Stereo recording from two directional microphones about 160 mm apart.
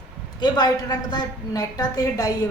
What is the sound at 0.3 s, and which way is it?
A woman's voice, 25° left (ahead or behind).